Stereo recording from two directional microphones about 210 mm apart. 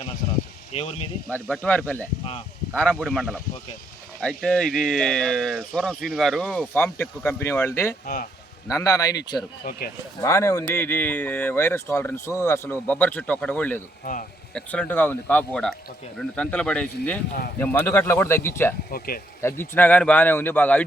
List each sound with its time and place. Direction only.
0.7 s speech: 30° left (ahead or behind)
1.3 s speech: 5° left (ahead or behind)
8.0 s speech: 45° left (ahead or behind)
8.7 s speech: 15° left (ahead or behind)
9.6 s speech: 45° left (ahead or behind)
10.2 s speech: 15° left (ahead or behind)
14.0 s speech: 40° left (ahead or behind)
14.5 s speech: 5° left (ahead or behind)
18.9 s speech: 45° left (ahead or behind)
19.4 s speech: 10° left (ahead or behind)